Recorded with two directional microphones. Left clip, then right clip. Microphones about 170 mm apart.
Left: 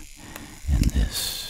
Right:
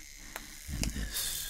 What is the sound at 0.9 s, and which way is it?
Snake, 55° left (ahead or behind).